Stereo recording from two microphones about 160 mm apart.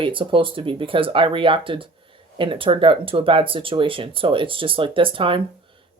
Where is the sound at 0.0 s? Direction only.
30° right (ahead or behind).